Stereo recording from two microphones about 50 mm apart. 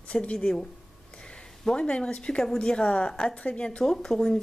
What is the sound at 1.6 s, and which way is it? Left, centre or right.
Speech, centre.